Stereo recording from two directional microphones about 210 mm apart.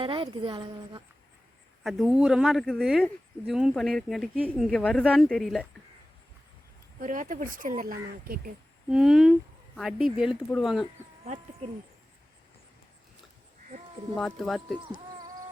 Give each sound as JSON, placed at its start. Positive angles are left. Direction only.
{"t": 0.0, "sound": "a woman's voice", "side_deg": -25}
{"t": 1.8, "sound": "speech", "side_deg": 0}
{"t": 7.0, "sound": "speech", "side_deg": -40}
{"t": 8.9, "sound": "speech", "side_deg": 0}
{"t": 14.2, "sound": "speech", "side_deg": 0}